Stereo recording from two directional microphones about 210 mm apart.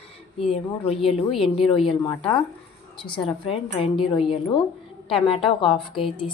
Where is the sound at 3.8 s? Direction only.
25° left (ahead or behind).